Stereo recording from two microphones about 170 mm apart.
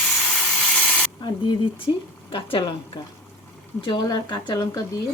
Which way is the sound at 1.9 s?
30° left (ahead or behind).